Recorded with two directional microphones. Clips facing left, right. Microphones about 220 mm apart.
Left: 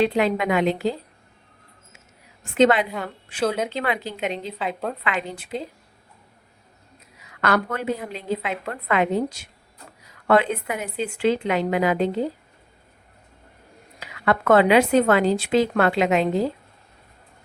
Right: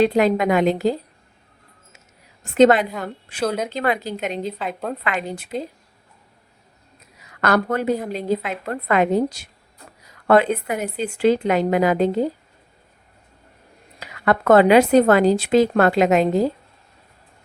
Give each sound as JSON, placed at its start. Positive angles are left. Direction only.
{"t": 0.0, "sound": "a woman's voice", "side_deg": -40}
{"t": 2.4, "sound": "a woman's voice", "side_deg": -40}
{"t": 3.4, "sound": "a woman's voice", "side_deg": 0}
{"t": 3.7, "sound": "a woman's voice", "side_deg": -40}
{"t": 4.5, "sound": "a woman's voice", "side_deg": 0}
{"t": 5.0, "sound": "a woman's voice", "side_deg": -45}
{"t": 7.4, "sound": "a woman's voice", "side_deg": -40}
{"t": 14.0, "sound": "speech", "side_deg": -40}